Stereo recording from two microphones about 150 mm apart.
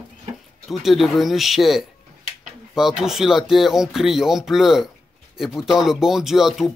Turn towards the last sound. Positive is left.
turn(degrees=0)  # may be behind; listen again after turning